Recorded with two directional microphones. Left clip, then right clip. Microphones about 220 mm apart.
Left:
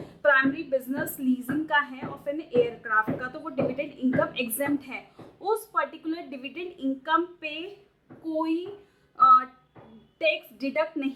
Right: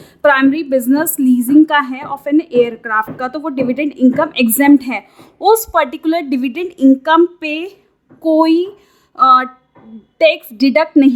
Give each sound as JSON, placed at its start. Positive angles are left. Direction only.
{"t": 0.2, "sound": "a woman's voice", "side_deg": -55}